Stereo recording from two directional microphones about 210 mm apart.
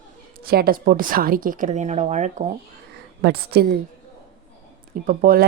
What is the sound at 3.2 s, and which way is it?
Speech, 50° right (ahead or behind).